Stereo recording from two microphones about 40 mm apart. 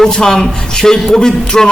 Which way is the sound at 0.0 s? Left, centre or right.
Centre.